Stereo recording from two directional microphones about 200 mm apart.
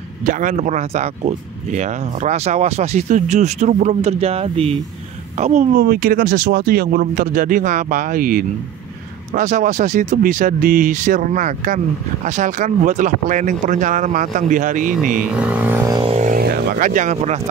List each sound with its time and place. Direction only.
0.2 s speech: 40° right (ahead or behind)
15.3 s a sound: 5° right (ahead or behind)
16.2 s vehicle: 40° right (ahead or behind)